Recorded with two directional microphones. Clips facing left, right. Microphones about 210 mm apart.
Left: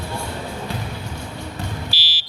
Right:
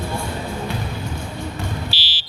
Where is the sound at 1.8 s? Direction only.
25° right (ahead or behind).